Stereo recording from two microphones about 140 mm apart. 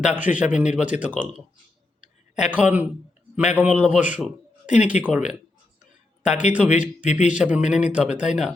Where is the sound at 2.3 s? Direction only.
5° right (ahead or behind).